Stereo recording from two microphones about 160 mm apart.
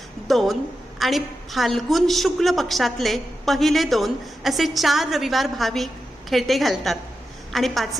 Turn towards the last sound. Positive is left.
turn(degrees=0)  # may be behind; listen again after turning